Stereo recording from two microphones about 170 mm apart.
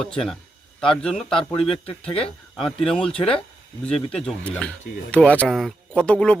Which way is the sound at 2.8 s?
5° left (ahead or behind).